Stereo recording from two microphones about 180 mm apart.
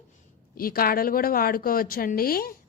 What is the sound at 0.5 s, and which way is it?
Speech, 55° left (ahead or behind).